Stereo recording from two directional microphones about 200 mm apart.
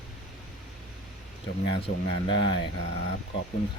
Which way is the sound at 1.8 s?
25° left (ahead or behind).